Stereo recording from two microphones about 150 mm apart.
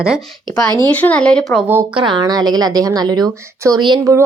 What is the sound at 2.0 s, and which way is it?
A woman's voice, 30° right (ahead or behind).